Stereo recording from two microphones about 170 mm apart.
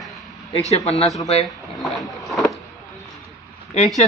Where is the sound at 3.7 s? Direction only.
45° left (ahead or behind).